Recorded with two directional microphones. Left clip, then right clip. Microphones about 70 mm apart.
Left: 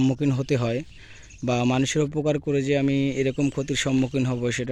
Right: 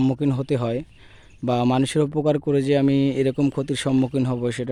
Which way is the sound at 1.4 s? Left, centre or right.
Right.